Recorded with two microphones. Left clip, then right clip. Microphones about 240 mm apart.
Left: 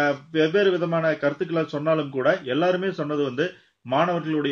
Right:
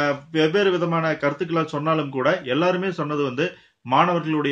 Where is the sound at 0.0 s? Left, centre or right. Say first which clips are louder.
Right 1 dB; centre.